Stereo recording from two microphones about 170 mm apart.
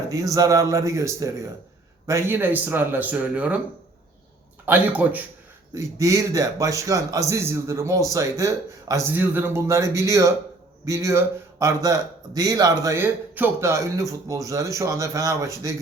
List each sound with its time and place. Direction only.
0.1 s a man's voice: 20° right (ahead or behind)
4.6 s a man's voice: 10° right (ahead or behind)